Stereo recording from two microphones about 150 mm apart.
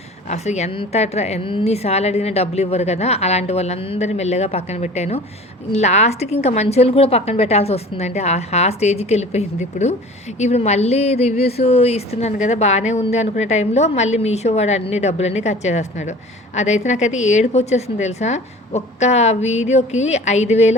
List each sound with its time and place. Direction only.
0.3 s speech: 50° left (ahead or behind)